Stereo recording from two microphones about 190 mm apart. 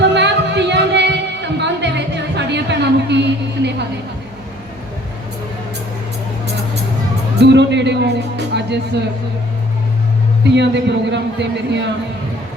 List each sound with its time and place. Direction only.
0.0 s music: 65° right (ahead or behind)
7.3 s a sound: 65° right (ahead or behind)
8.5 s speech: 65° right (ahead or behind)
10.5 s a man's voice: 65° right (ahead or behind)